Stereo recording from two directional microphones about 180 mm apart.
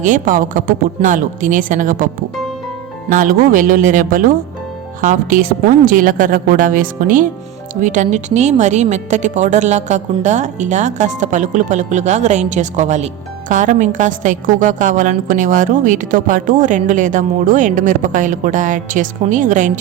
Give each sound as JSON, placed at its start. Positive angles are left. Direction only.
{"t": 0.0, "sound": "a woman's voice", "side_deg": -45}
{"t": 3.1, "sound": "a woman's voice", "side_deg": -50}